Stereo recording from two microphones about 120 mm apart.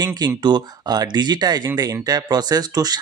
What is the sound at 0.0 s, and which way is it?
Speech, 35° right (ahead or behind).